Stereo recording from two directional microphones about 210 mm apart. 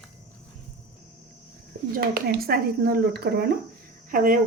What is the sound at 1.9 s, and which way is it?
Speech, 45° right (ahead or behind).